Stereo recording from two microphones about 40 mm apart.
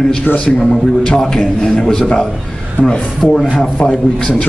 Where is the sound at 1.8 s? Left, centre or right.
Centre.